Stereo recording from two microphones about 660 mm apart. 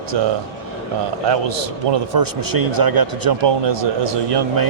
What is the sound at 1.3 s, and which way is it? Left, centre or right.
A man's voice, right.